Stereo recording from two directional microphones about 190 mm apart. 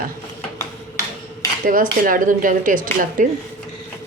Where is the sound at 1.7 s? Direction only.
45° right (ahead or behind).